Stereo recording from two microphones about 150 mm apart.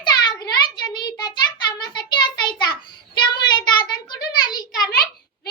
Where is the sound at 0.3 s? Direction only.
30° left (ahead or behind).